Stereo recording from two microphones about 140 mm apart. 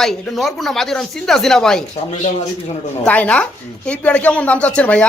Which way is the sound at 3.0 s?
10° left (ahead or behind).